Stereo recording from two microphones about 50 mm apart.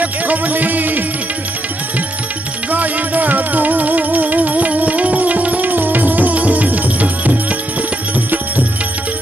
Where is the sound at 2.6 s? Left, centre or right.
Right.